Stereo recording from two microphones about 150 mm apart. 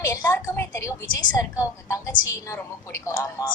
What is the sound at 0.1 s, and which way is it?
Speech, 15° left (ahead or behind).